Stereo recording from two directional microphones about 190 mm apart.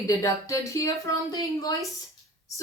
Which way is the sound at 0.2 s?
15° left (ahead or behind).